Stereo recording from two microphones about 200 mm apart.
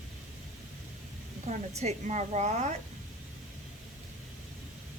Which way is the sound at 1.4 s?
35° right (ahead or behind).